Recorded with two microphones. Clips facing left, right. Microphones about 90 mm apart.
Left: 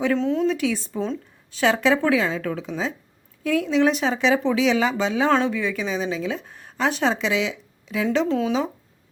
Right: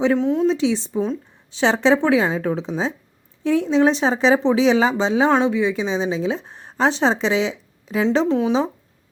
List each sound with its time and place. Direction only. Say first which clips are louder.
0.0 s a woman's voice: right 3 dB; 20° right (ahead or behind)
8.3 s a woman's voice: right 4 dB; 20° right (ahead or behind)